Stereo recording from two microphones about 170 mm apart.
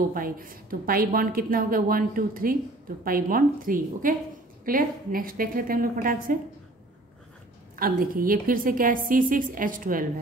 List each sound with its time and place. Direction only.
0.1 s a woman's voice: 55° right (ahead or behind)
7.7 s a woman's voice: 60° right (ahead or behind)